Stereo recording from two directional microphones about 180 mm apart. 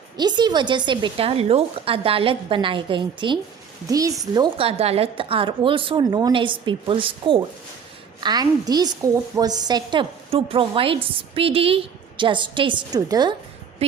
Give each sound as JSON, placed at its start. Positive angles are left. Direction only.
{"t": 0.2, "sound": "a woman's voice", "side_deg": -25}